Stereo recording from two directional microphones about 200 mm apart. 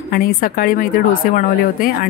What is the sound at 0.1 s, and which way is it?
Speech, 45° left (ahead or behind).